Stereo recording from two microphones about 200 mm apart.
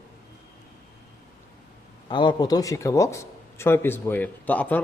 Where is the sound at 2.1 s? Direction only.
20° left (ahead or behind).